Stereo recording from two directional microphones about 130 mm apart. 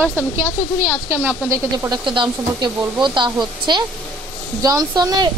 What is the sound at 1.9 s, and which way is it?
A woman's voice, 40° right (ahead or behind).